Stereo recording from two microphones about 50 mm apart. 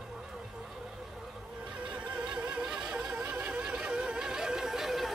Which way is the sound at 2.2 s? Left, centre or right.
Right.